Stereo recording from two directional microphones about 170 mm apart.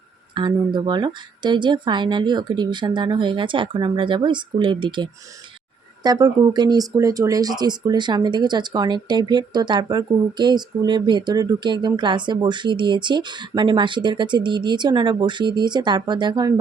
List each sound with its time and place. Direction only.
0.3 s speech: 25° right (ahead or behind)